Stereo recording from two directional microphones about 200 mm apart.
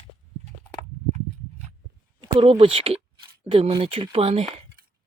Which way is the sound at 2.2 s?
25° right (ahead or behind).